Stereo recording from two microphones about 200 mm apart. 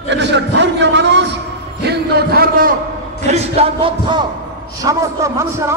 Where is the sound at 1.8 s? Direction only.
55° right (ahead or behind).